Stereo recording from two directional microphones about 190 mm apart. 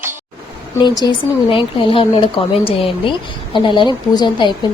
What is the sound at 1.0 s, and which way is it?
Speech, 25° left (ahead or behind).